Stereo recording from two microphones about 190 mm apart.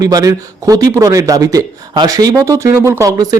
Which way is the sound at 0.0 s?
20° right (ahead or behind).